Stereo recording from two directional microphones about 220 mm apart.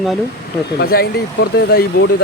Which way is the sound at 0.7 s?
45° left (ahead or behind).